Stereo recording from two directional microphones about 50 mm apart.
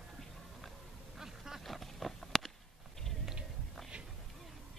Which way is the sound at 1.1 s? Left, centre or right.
Centre.